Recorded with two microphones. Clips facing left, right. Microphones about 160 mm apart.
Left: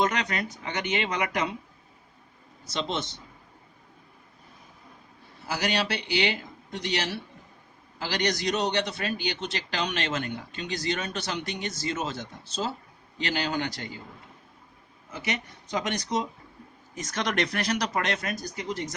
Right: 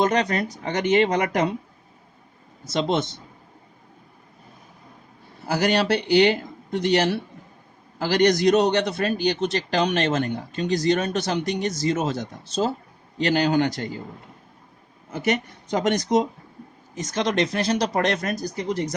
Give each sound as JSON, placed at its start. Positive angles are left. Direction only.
{"t": 0.0, "sound": "a man's voice", "side_deg": -35}
{"t": 2.7, "sound": "a man's voice", "side_deg": -50}
{"t": 5.5, "sound": "a man's voice", "side_deg": -50}
{"t": 15.1, "sound": "a man's voice", "side_deg": -50}
{"t": 16.9, "sound": "speech", "side_deg": -30}